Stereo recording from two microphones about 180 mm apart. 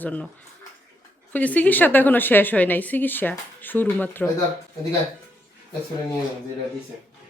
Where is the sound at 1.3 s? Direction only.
10° left (ahead or behind).